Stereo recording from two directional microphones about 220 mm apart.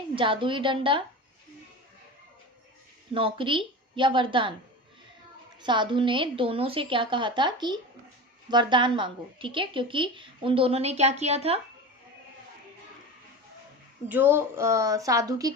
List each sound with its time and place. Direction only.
0.2 s a woman's voice: 20° right (ahead or behind)
3.2 s a woman's voice: 25° right (ahead or behind)
5.6 s a woman's voice: 20° right (ahead or behind)
14.1 s speech: 10° right (ahead or behind)